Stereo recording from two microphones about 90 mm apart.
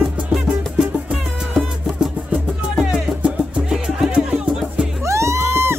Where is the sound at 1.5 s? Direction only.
10° right (ahead or behind).